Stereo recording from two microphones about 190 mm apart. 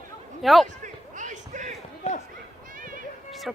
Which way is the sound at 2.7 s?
45° right (ahead or behind).